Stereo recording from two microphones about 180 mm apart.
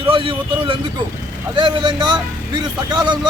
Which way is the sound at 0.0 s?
30° right (ahead or behind).